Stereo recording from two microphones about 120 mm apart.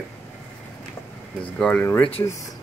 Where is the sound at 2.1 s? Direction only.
55° left (ahead or behind).